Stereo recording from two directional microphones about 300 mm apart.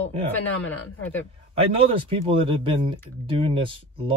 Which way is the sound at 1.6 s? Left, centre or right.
Centre.